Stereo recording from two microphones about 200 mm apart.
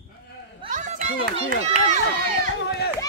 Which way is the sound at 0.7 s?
40° right (ahead or behind).